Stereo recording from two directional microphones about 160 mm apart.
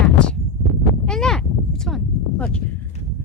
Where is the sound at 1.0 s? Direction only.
5° left (ahead or behind).